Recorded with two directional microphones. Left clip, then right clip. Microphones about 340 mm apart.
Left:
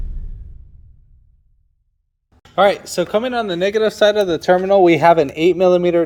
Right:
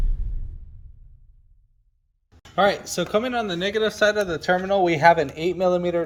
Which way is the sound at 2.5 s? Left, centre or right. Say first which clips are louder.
Left 6 dB; centre.